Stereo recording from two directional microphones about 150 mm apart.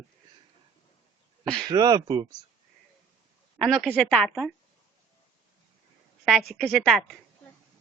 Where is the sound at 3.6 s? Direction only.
Centre (ahead or behind).